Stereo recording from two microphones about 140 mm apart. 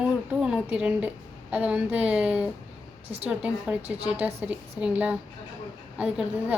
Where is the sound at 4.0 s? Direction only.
45° right (ahead or behind).